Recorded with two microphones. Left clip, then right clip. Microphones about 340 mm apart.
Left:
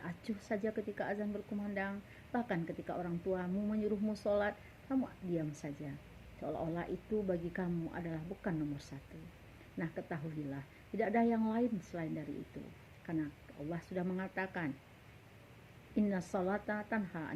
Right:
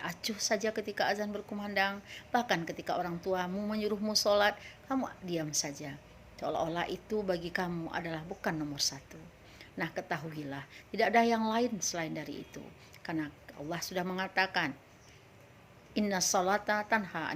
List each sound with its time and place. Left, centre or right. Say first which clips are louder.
0.0 s a sound: right 8 dB; right
0.4 s speech: right 6 dB; right
13.6 s speech: right 6 dB; right
16.3 s speech: right 10 dB; right